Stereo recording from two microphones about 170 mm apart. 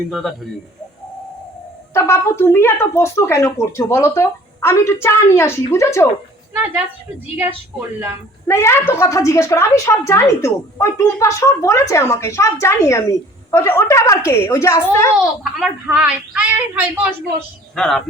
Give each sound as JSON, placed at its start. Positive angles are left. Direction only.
{"t": 0.1, "sound": "speech", "side_deg": 0}
{"t": 1.9, "sound": "a woman's voice", "side_deg": 15}
{"t": 7.3, "sound": "a woman's voice", "side_deg": -10}
{"t": 8.4, "sound": "a woman's voice", "side_deg": 15}
{"t": 15.2, "sound": "a woman's voice", "side_deg": -5}
{"t": 17.7, "sound": "speech", "side_deg": 5}